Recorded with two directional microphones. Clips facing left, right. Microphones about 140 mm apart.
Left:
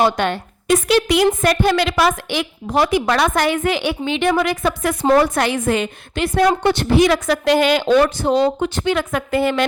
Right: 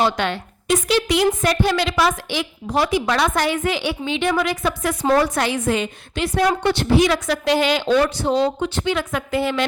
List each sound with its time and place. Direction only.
0.0 s a woman's voice: 50° left (ahead or behind)